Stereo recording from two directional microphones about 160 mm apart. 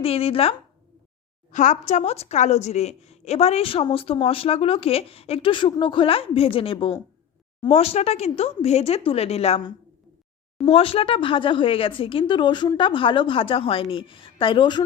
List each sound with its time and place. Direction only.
0.0 s a woman's voice: 35° left (ahead or behind)
1.5 s a woman's voice: 50° left (ahead or behind)
10.7 s a woman's voice: 35° left (ahead or behind)